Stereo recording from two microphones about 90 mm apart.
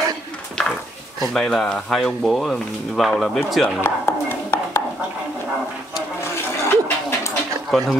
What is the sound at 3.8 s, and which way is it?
Dishes, 30° left (ahead or behind).